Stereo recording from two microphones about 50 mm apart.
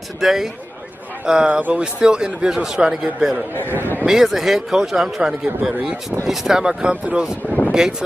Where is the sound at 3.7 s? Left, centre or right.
Left.